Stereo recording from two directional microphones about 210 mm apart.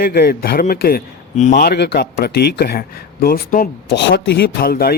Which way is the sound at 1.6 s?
50° left (ahead or behind).